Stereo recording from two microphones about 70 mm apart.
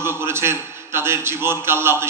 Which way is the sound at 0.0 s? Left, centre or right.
Right.